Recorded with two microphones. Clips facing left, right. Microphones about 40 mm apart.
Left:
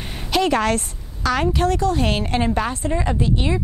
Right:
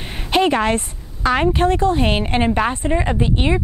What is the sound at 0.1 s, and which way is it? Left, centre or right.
A woman's voice, right.